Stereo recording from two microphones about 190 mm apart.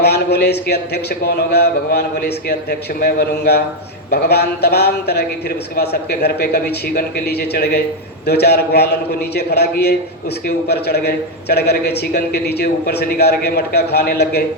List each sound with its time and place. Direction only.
0.0 s a man's voice: 60° left (ahead or behind)